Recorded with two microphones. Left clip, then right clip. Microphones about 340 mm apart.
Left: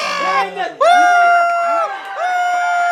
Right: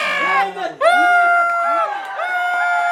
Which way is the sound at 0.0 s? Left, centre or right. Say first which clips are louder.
Even; centre.